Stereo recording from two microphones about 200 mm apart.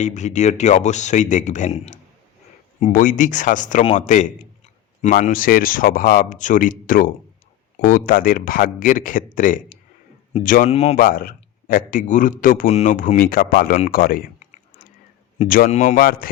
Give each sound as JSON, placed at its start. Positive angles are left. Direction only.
{"t": 0.0, "sound": "a man's voice", "side_deg": 35}
{"t": 10.9, "sound": "a man's voice", "side_deg": 45}